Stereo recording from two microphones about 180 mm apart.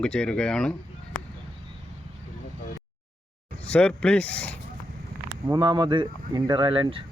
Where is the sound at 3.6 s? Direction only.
5° left (ahead or behind).